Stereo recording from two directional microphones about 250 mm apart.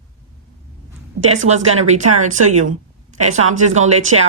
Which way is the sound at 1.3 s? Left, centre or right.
Right.